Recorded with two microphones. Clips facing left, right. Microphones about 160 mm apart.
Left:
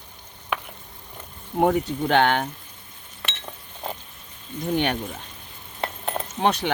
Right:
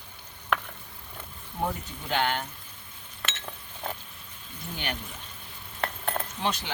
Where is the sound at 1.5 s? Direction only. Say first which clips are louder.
Left 12 dB; 70° left (ahead or behind).